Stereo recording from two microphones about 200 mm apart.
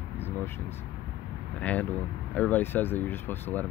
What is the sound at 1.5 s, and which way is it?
Speech, 5° left (ahead or behind).